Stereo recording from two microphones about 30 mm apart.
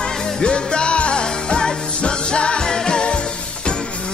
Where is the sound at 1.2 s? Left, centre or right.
Left.